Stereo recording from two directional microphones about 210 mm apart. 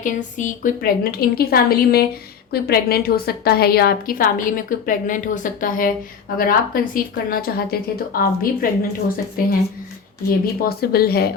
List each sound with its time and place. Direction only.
0.0 s a woman's voice: 35° left (ahead or behind)